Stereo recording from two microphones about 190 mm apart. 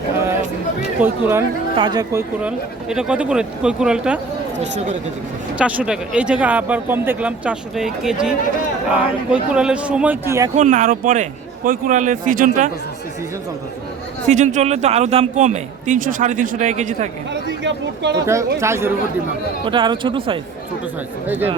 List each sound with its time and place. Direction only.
0.9 s speech: 10° right (ahead or behind)
1.7 s speech: 25° right (ahead or behind)
2.9 s speech: 5° right (ahead or behind)
4.5 s speech: 40° right (ahead or behind)
5.5 s speech: 5° right (ahead or behind)
10.6 s a man's voice: 40° right (ahead or behind)
14.3 s a man's voice: 40° right (ahead or behind)
17.6 s speech: 65° right (ahead or behind)
18.5 s speech: 15° right (ahead or behind)
19.6 s speech: 25° right (ahead or behind)